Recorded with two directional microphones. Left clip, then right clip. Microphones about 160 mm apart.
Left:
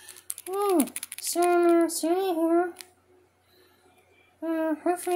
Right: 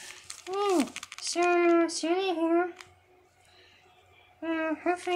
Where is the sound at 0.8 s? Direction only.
30° left (ahead or behind).